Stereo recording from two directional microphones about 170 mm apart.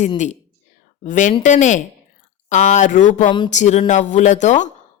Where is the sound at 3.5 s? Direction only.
40° left (ahead or behind).